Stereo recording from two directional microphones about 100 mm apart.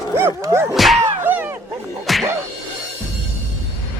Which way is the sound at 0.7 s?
Centre (ahead or behind).